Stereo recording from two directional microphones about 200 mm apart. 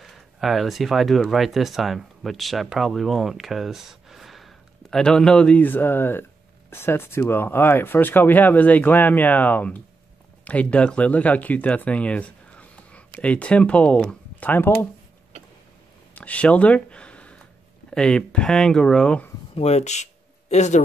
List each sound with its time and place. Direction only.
0.0 s speech: centre (ahead or behind)
16.2 s speech: 5° left (ahead or behind)
19.5 s speech: 30° left (ahead or behind)